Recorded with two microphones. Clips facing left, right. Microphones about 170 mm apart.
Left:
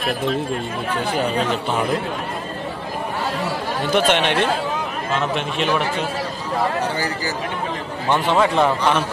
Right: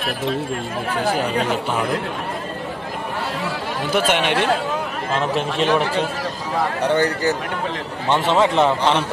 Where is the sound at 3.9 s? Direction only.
5° right (ahead or behind).